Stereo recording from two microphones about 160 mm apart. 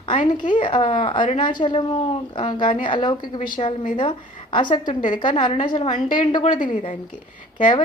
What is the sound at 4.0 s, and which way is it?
A woman's voice, 30° left (ahead or behind).